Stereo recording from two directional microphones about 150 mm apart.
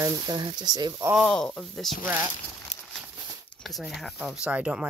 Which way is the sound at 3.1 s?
25° right (ahead or behind).